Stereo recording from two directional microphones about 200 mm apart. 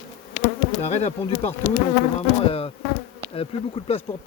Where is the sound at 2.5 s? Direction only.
30° left (ahead or behind).